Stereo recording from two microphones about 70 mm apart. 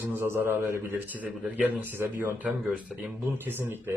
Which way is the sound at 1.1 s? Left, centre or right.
Right.